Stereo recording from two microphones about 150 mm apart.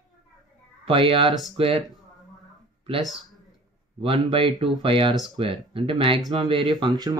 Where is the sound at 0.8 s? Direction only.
35° right (ahead or behind).